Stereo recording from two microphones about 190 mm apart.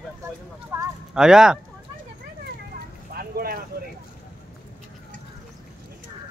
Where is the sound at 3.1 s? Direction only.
50° right (ahead or behind).